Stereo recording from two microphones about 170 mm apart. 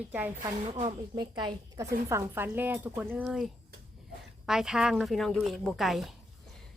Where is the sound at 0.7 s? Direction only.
35° right (ahead or behind).